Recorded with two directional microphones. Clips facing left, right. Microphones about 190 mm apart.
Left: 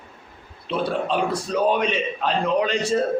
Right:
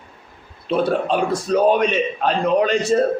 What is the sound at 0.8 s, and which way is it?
A man's voice, 45° right (ahead or behind).